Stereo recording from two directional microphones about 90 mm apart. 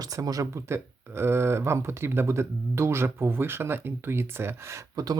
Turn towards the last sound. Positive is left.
turn(degrees=-40)  # may be behind; listen again after turning